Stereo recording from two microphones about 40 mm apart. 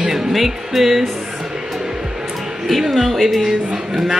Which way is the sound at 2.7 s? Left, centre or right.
Centre.